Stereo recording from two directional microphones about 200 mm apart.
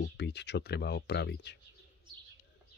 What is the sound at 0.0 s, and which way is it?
Speech, 60° left (ahead or behind).